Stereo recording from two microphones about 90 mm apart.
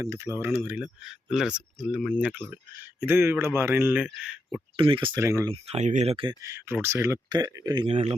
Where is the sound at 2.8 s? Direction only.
25° right (ahead or behind).